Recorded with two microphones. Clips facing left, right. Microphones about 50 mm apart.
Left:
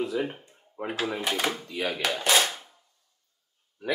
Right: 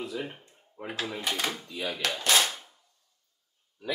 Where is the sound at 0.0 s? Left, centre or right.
Centre.